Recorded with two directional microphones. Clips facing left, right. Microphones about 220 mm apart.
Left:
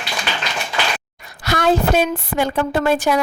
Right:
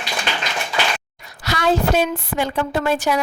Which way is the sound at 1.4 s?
55° left (ahead or behind).